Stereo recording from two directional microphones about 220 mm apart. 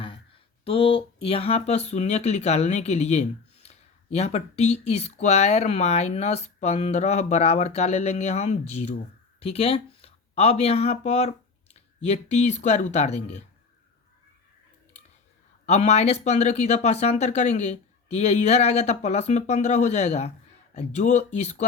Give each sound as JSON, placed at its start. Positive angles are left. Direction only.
{"t": 0.6, "sound": "speech", "side_deg": 25}
{"t": 15.6, "sound": "speech", "side_deg": 30}